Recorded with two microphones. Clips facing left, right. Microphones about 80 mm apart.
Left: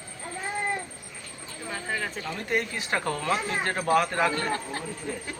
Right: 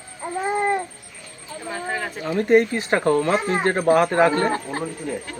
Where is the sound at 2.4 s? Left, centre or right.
Right.